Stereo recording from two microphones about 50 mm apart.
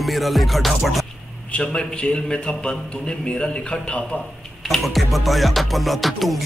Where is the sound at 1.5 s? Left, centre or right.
Left.